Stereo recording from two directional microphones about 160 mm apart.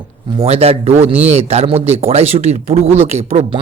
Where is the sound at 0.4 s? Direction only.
40° right (ahead or behind).